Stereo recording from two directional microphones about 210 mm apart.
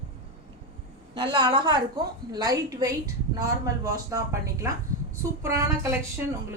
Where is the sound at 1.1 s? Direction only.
20° right (ahead or behind).